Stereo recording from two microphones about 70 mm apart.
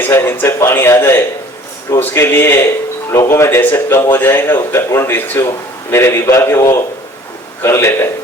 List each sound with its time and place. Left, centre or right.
0.0 s a man's voice: left
5.1 s speech: left
5.5 s a man's voice: left